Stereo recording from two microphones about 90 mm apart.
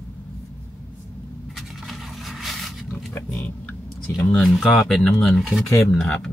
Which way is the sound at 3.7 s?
15° left (ahead or behind).